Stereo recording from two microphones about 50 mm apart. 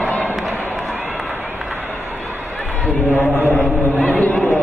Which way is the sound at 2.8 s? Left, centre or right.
Left.